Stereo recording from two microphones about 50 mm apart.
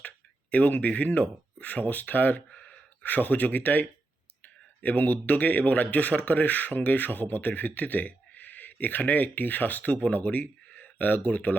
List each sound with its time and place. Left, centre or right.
0.5 s speech: left